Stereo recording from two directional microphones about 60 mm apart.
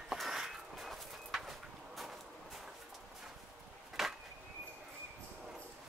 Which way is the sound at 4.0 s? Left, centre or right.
Centre.